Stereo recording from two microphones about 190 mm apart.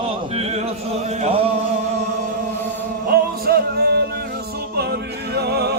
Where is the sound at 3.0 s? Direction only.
55° right (ahead or behind).